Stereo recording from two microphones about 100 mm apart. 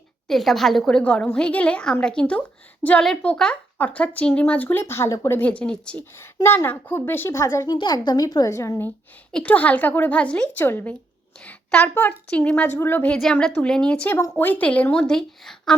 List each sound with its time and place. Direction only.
0.3 s speech: centre (ahead or behind); by 5.4 s 30° left (ahead or behind)
5.4 s speech: 15° left (ahead or behind)
6.1 s a woman's voice: 25° left (ahead or behind)
9.3 s a woman's voice: 15° left (ahead or behind)
11.3 s a sound: 5° left (ahead or behind)
11.8 s a woman's voice: 20° left (ahead or behind)
13.2 s a woman's voice: 5° left (ahead or behind)